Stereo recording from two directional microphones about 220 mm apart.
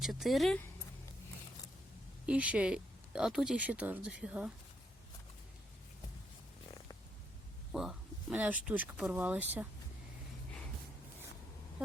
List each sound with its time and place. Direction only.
0.0 s speech: centre (ahead or behind)
2.2 s speech: 5° right (ahead or behind)
7.7 s speech: centre (ahead or behind)